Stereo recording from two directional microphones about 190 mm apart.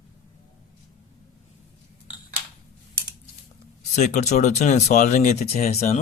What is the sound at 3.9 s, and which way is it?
Speech, 40° left (ahead or behind).